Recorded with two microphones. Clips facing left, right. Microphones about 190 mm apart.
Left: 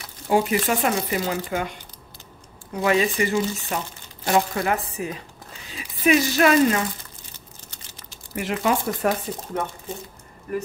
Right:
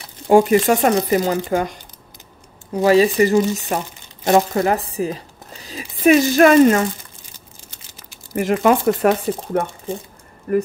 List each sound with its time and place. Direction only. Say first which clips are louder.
0.3 s speech: right 8 dB; 50° right (ahead or behind)
8.3 s speech: right 8 dB; 45° right (ahead or behind)
8.8 s speech: right 8 dB; 65° right (ahead or behind)
10.5 s speech: right 9 dB; 50° right (ahead or behind)